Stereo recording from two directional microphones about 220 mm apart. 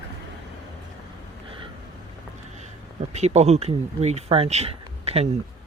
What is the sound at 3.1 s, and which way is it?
Speech, 30° right (ahead or behind).